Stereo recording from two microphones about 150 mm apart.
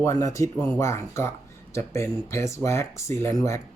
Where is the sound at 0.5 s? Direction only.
10° left (ahead or behind).